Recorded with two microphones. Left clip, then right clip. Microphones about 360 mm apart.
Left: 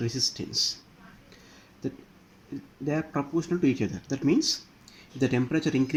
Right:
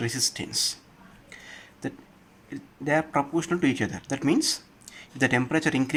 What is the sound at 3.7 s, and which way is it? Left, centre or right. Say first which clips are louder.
Speech: right 2 dB; right.